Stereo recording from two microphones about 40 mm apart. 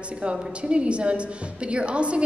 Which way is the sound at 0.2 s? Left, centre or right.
Right.